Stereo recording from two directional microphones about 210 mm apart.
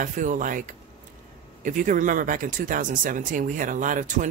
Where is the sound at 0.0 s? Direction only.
40° right (ahead or behind).